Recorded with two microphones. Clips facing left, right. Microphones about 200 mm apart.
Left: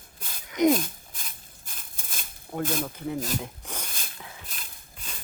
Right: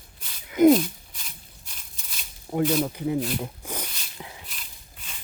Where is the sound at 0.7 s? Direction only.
50° left (ahead or behind).